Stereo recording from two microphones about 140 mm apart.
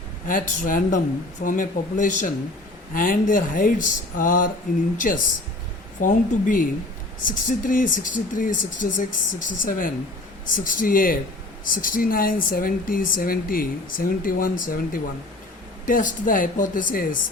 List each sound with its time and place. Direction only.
0.3 s speech: 75° left (ahead or behind)
2.9 s speech: 80° left